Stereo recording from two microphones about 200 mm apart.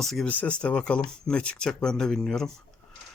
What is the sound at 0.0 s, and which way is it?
Speech, centre (ahead or behind).